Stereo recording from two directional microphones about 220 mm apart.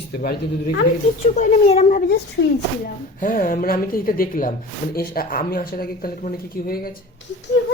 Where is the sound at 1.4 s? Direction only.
30° left (ahead or behind).